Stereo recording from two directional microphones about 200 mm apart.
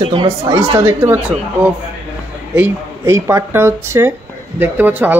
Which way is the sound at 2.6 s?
15° right (ahead or behind).